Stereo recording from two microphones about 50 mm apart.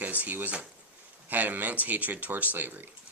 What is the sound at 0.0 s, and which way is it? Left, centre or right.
Speech, right.